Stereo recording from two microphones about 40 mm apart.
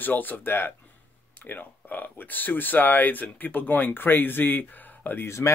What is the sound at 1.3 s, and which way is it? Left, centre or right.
Speech, left.